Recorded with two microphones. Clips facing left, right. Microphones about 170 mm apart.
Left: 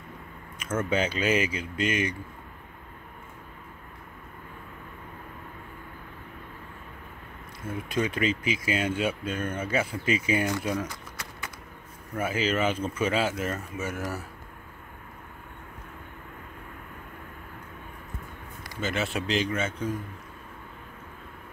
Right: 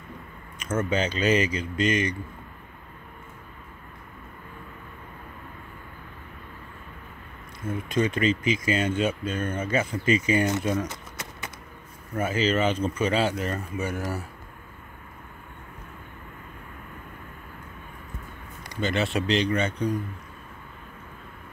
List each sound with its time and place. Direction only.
0.7 s speech: 10° left (ahead or behind)
7.6 s speech: 10° left (ahead or behind)
10.9 s a sound: 20° right (ahead or behind)
12.2 s speech: 10° left (ahead or behind)
18.7 s speech: centre (ahead or behind)